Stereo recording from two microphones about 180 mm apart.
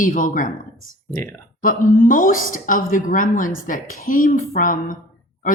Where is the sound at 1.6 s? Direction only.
50° left (ahead or behind).